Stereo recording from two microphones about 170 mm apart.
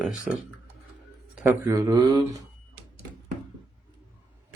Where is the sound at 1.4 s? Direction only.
15° right (ahead or behind).